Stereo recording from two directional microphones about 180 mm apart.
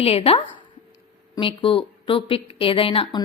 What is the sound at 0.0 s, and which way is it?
A woman's voice, 30° left (ahead or behind).